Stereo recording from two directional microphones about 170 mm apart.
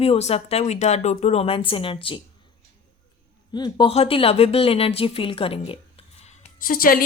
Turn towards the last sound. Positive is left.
turn(degrees=55)  # may be behind; listen again after turning